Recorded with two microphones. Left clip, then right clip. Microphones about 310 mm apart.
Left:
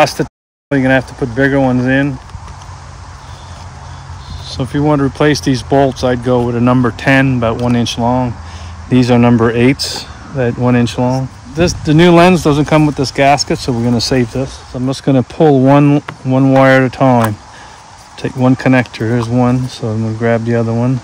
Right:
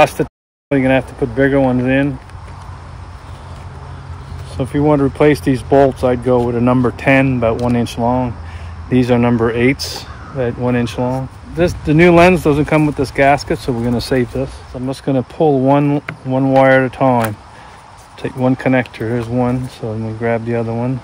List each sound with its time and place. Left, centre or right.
0.0 s speech: left
4.6 s speech: left